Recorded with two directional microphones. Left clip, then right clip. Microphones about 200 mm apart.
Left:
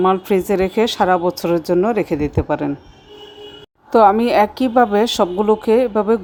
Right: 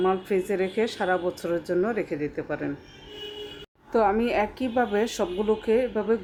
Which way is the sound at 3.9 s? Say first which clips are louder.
Left 11 dB; 35° left (ahead or behind).